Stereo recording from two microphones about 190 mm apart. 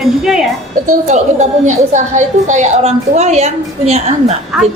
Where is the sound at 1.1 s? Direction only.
40° right (ahead or behind).